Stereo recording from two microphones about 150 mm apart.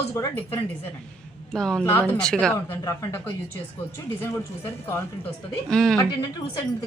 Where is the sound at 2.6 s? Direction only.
20° left (ahead or behind).